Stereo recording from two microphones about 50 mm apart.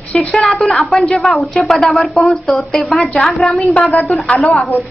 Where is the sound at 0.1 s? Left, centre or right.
Centre.